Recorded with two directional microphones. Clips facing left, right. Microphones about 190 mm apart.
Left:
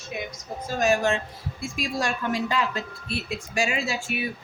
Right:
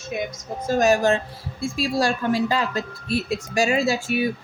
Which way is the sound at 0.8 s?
40° right (ahead or behind).